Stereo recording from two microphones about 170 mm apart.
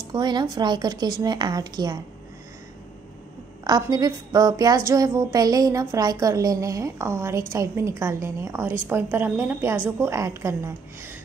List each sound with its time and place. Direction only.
0.1 s a woman's voice: 25° right (ahead or behind)
3.6 s a woman's voice: 25° right (ahead or behind)